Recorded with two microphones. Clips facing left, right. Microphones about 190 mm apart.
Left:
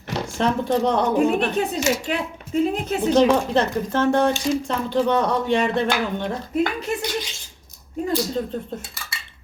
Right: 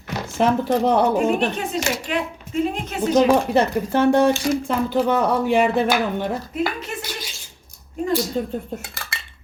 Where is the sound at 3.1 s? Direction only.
10° right (ahead or behind).